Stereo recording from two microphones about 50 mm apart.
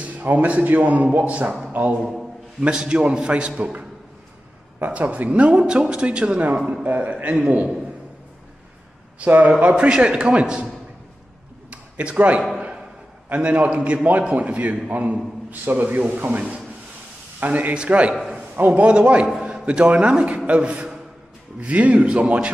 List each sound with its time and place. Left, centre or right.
0.2 s a man's voice: right
2.6 s a man's voice: centre
4.8 s a man's voice: right
9.2 s a man's voice: right
11.7 s a sound: right
13.3 s a man's voice: right
17.5 s a man's voice: right